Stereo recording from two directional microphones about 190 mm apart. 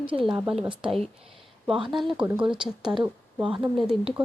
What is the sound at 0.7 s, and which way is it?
Speech, 25° right (ahead or behind).